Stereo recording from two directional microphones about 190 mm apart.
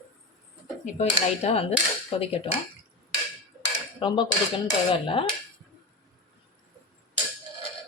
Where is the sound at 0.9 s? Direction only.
35° left (ahead or behind).